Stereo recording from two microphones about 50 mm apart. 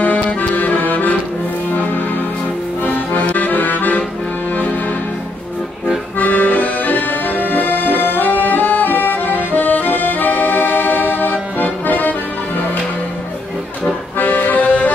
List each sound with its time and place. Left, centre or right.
0.0 s accordion: left
1.7 s music: left
2.8 s accordion: left
6.1 s accordion: left
14.1 s accordion: left